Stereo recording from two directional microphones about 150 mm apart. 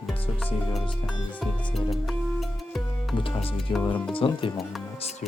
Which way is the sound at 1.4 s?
Centre (ahead or behind).